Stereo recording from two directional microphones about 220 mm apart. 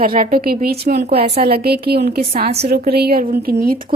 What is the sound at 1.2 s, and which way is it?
Speech, 30° right (ahead or behind).